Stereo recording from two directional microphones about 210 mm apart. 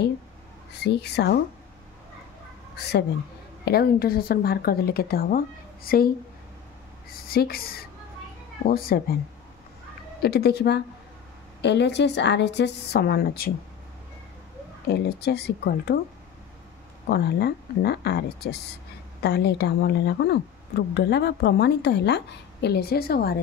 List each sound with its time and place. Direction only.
0.8 s a woman's voice: 50° left (ahead or behind)
2.7 s a woman's voice: 50° left (ahead or behind)
7.2 s a woman's voice: 45° left (ahead or behind)
10.2 s a woman's voice: 50° left (ahead or behind)
14.9 s a woman's voice: 50° left (ahead or behind)
17.1 s a woman's voice: 50° left (ahead or behind)